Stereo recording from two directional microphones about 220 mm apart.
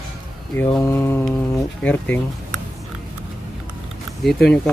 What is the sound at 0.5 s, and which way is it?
Speech, 10° left (ahead or behind).